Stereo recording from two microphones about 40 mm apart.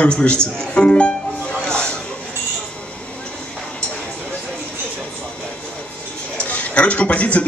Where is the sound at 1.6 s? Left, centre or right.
Left.